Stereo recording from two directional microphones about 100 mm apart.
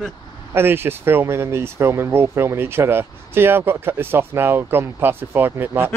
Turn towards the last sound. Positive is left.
turn(degrees=-20)  # may be behind; listen again after turning